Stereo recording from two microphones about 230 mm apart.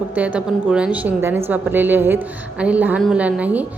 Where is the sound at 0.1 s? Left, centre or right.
Centre.